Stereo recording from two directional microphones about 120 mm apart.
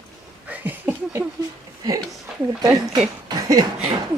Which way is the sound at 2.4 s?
30° right (ahead or behind).